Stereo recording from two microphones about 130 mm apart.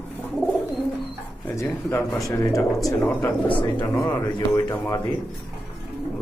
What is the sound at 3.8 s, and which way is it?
Speech, 25° left (ahead or behind).